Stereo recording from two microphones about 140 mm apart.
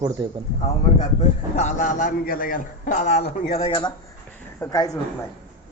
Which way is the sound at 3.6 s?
35° left (ahead or behind).